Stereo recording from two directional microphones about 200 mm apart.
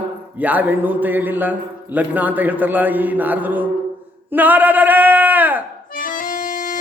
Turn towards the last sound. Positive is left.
turn(degrees=40)  # may be behind; listen again after turning